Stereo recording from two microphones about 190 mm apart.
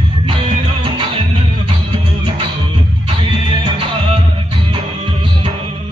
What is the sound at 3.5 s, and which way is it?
Music, 25° right (ahead or behind).